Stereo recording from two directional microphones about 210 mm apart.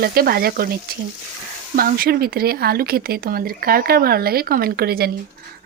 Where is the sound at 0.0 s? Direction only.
45° right (ahead or behind).